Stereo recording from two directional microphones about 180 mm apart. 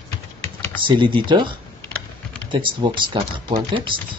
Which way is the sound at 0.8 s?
25° right (ahead or behind).